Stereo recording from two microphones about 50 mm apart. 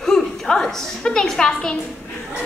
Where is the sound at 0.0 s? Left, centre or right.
Centre.